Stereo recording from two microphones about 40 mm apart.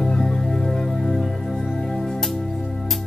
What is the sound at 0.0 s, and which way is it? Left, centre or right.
Music, centre.